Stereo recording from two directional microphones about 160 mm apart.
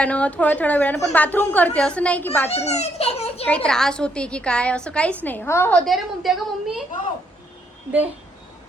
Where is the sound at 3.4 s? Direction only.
5° left (ahead or behind).